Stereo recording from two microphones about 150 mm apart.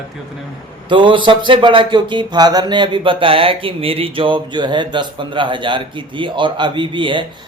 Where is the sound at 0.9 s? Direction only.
35° right (ahead or behind).